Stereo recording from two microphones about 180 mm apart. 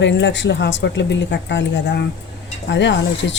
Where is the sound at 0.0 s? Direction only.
80° left.